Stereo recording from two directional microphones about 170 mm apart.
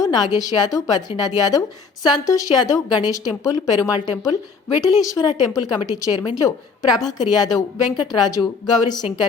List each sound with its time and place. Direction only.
0.0 s a woman's voice: 25° left (ahead or behind)